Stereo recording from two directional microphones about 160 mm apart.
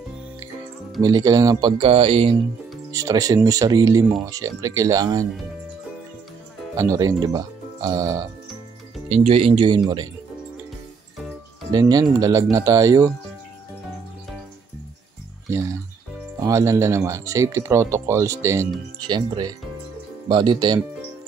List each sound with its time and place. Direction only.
1.0 s speech: 25° right (ahead or behind)
2.9 s speech: 20° right (ahead or behind)
6.8 s speech: 20° right (ahead or behind)
9.1 s speech: 40° right (ahead or behind)
11.7 s speech: 25° right (ahead or behind)
16.3 s speech: 20° right (ahead or behind)